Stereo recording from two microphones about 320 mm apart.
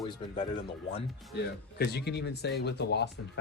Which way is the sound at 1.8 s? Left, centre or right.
Left.